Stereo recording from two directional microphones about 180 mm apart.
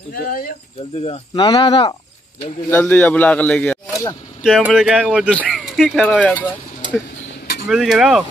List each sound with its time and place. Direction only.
0.1 s speech: 55° left (ahead or behind)
1.0 s speech: 30° left (ahead or behind)
2.7 s a man's voice: 10° left (ahead or behind)
6.8 s a sound: 25° right (ahead or behind)
7.6 s speech: 5° right (ahead or behind)